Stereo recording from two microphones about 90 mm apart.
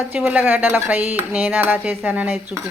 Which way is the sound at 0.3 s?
20° right (ahead or behind).